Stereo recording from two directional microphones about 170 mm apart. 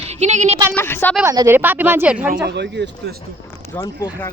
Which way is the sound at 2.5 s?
90° right.